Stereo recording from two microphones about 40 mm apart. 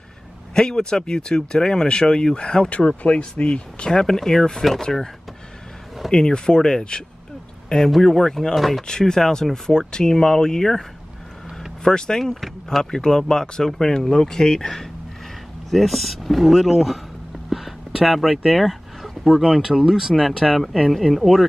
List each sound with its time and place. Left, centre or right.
0.6 s speech: centre
4.0 s speech: centre
6.1 s speech: centre
7.9 s speech: centre
8.8 s speech: centre
11.8 s speech: centre
17.5 s a sound: centre
19.2 s speech: centre